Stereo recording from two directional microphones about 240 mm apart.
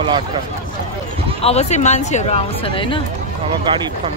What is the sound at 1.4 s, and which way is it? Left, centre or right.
Speech, left.